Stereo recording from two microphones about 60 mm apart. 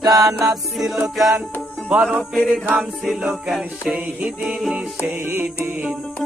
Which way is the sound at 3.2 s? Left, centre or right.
Centre.